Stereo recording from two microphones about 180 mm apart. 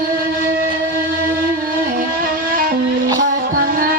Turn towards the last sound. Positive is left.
turn(degrees=-55)  # may be behind; listen again after turning